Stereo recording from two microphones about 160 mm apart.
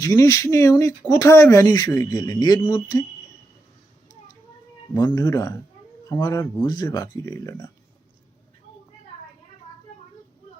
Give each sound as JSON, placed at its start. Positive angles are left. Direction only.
{"t": 0.0, "sound": "speech", "side_deg": 20}
{"t": 4.1, "sound": "a sound", "side_deg": 25}
{"t": 4.9, "sound": "speech", "side_deg": 20}